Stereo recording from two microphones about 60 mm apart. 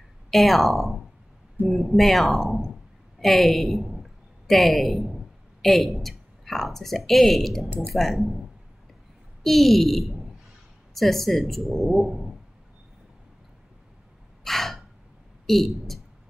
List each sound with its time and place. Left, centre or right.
0.3 s a woman's voice: centre
9.4 s a woman's voice: centre
12.0 s a sound: centre
14.4 s gasp: centre
15.4 s speech: centre